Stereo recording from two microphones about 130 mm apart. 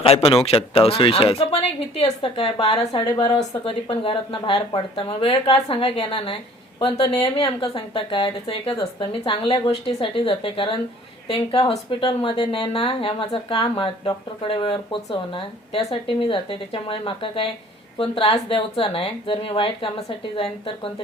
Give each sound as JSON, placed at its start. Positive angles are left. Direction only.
{"t": 0.0, "sound": "speech", "side_deg": 50}
{"t": 2.9, "sound": "a woman's voice", "side_deg": 35}